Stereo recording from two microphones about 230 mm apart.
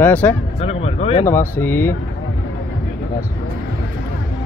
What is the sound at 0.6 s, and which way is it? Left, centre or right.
Speech, left.